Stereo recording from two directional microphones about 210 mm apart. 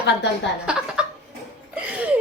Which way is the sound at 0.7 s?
5° right (ahead or behind).